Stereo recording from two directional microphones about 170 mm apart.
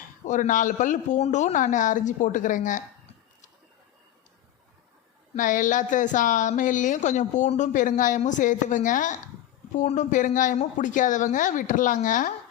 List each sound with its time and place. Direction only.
0.3 s a woman's voice: 50° left (ahead or behind)
5.4 s a woman's voice: 50° left (ahead or behind)